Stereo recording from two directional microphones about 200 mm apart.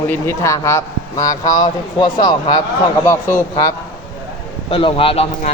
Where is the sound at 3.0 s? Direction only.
10° left (ahead or behind).